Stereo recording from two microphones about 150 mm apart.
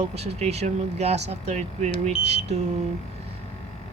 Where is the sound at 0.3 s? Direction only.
45° right (ahead or behind).